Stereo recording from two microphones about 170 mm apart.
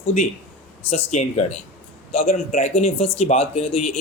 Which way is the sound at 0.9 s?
45° left (ahead or behind).